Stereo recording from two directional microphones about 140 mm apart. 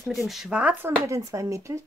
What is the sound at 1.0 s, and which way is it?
Speech, 20° right (ahead or behind).